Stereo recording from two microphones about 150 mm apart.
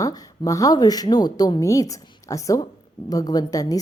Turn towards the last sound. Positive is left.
turn(degrees=25)  # may be behind; listen again after turning